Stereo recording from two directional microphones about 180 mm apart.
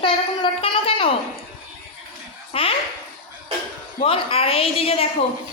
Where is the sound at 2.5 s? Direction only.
30° left (ahead or behind).